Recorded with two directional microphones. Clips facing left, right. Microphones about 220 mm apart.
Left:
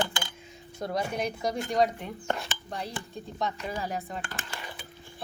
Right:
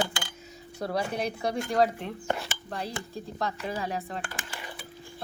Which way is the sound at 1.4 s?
5° right (ahead or behind).